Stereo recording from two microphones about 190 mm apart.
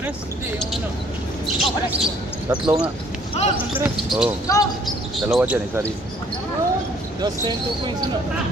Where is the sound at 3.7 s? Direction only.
5° right (ahead or behind).